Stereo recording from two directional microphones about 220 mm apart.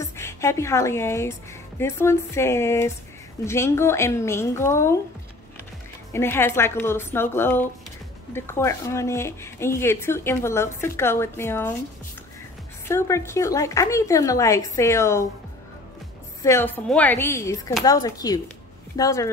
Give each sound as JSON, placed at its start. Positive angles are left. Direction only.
{"t": 0.0, "sound": "a woman's voice", "side_deg": 15}
{"t": 6.1, "sound": "speech", "side_deg": 10}
{"t": 12.8, "sound": "speech", "side_deg": 10}
{"t": 16.4, "sound": "speech", "side_deg": 10}